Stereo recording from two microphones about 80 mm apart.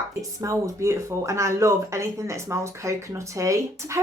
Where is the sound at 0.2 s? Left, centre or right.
Right.